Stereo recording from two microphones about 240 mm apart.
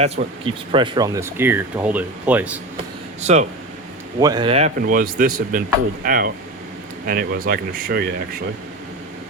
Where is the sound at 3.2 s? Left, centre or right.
Right.